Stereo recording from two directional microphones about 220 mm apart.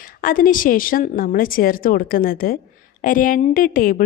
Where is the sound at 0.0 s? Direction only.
40° left (ahead or behind).